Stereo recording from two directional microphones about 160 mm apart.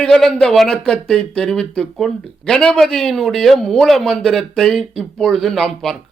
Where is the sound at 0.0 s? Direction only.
5° left (ahead or behind).